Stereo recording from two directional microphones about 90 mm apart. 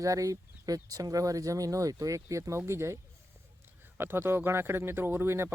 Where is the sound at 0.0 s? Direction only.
40° right (ahead or behind).